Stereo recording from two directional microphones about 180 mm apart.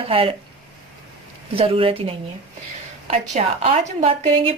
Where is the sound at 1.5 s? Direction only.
30° right (ahead or behind).